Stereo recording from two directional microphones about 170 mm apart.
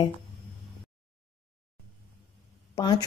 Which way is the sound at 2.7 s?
25° left (ahead or behind).